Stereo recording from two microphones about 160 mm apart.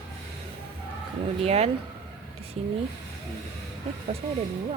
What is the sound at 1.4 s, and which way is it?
Speech, 40° right (ahead or behind).